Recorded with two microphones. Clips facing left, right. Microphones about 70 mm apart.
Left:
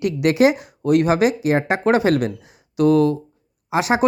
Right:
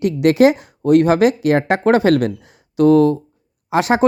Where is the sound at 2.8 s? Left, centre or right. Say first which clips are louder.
Right 4 dB; right.